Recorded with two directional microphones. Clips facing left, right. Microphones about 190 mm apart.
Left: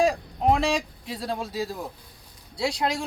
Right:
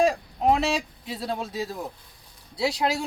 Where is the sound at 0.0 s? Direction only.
Centre (ahead or behind).